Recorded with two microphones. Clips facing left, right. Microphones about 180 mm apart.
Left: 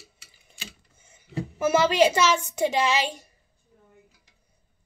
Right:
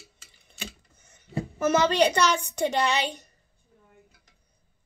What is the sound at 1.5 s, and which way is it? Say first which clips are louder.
A woman's voice: left 1 dB; 10° left (ahead or behind).